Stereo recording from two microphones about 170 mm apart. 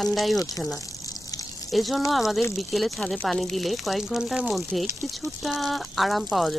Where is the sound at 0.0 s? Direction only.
Centre (ahead or behind).